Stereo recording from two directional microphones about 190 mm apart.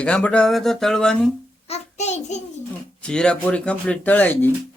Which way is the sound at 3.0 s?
5° left (ahead or behind).